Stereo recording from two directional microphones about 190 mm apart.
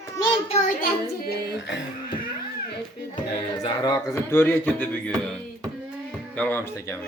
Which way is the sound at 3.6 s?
20° left (ahead or behind).